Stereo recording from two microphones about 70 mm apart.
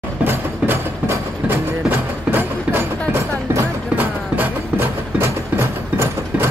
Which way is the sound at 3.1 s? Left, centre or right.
Right.